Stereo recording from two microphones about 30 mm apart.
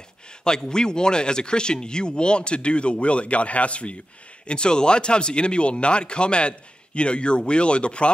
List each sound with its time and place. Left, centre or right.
0.6 s speech: left
4.5 s speech: left